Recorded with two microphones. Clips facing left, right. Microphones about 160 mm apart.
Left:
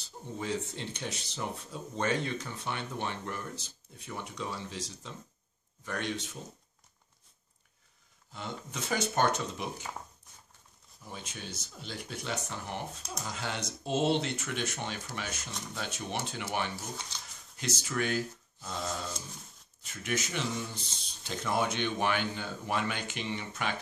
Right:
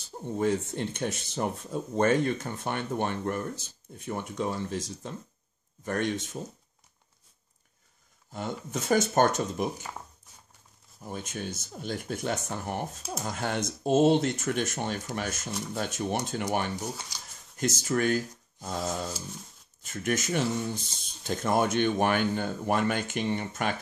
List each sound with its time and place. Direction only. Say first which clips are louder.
0.4 s speech: right 8 dB; 50° right (ahead or behind)
8.3 s speech: right 6 dB; 45° right (ahead or behind)
11.0 s speech: right 8 dB; 50° right (ahead or behind)
17.1 s speech: right 1 dB; 10° right (ahead or behind)
17.6 s speech: right 6 dB; 45° right (ahead or behind)
19.8 s speech: right 5 dB; 50° right (ahead or behind)